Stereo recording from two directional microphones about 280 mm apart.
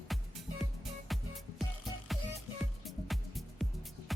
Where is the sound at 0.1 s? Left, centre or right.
Centre.